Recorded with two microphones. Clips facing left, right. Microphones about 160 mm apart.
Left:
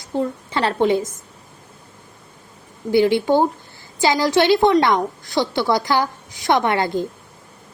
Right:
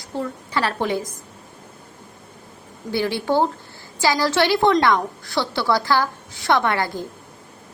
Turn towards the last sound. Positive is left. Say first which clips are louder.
# left 2 dB
turn(degrees=20)  # may be behind; listen again after turning